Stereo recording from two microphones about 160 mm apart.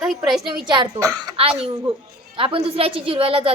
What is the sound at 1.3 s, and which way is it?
A woman's voice, 35° right (ahead or behind).